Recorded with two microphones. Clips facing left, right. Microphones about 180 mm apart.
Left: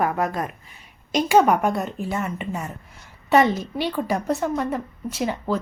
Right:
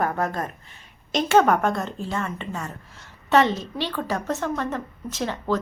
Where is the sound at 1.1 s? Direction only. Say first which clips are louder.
Left 1 dB; 5° left (ahead or behind).